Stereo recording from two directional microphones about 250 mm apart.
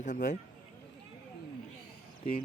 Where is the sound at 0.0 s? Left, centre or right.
Left.